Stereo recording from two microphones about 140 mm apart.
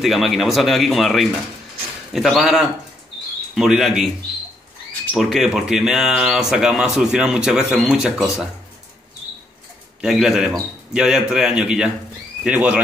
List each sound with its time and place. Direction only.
0.0 s speech: centre (ahead or behind)
5.1 s speech: centre (ahead or behind)
10.0 s speech: centre (ahead or behind)